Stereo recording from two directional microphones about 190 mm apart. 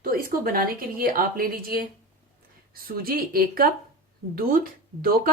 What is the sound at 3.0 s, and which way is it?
Speech, 50° right (ahead or behind).